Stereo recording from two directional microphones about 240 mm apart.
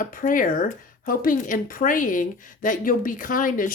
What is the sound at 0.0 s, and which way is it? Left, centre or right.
Speech, left.